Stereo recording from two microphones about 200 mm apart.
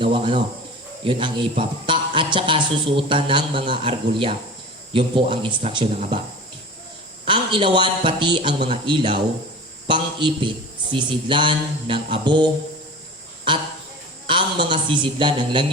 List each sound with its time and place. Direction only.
0.0 s a man's voice: 25° right (ahead or behind)
7.3 s a man's voice: 25° right (ahead or behind)
14.3 s a man's voice: 25° right (ahead or behind)